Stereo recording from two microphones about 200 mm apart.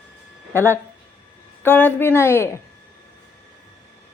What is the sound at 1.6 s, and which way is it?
Speech, 10° left (ahead or behind).